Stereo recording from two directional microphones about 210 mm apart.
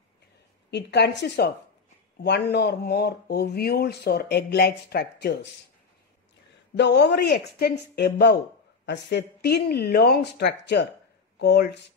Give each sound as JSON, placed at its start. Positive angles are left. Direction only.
{"t": 0.7, "sound": "speech", "side_deg": 55}
{"t": 6.8, "sound": "speech", "side_deg": 50}